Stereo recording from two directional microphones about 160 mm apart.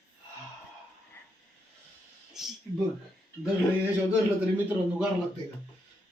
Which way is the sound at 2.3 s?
5° right (ahead or behind).